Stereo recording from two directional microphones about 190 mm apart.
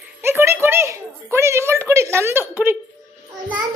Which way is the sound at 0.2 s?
10° right (ahead or behind).